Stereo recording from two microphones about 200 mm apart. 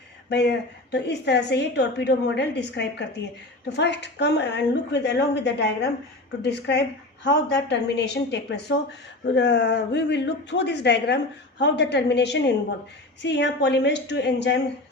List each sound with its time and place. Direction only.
0.3 s speech: 55° left (ahead or behind)